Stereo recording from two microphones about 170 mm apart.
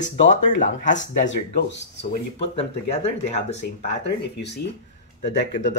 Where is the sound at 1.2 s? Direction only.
90° left.